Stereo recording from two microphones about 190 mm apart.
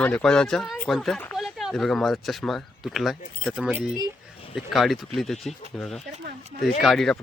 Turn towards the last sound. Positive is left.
turn(degrees=0)  # may be behind; listen again after turning